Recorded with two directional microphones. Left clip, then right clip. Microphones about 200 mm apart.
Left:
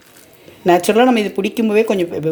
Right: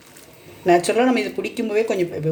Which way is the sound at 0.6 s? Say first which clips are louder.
Left 5 dB; 35° left (ahead or behind).